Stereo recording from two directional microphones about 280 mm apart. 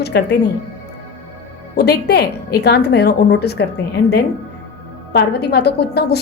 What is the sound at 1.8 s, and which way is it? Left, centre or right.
A woman's voice, left.